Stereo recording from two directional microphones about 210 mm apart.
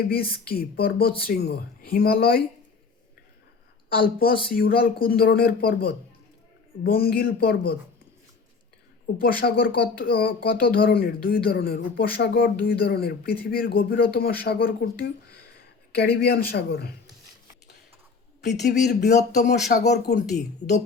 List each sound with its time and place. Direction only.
0.0 s speech: 45° left (ahead or behind)
3.8 s speech: 45° left (ahead or behind)
9.2 s speech: 45° left (ahead or behind)
18.9 s speech: 50° left (ahead or behind)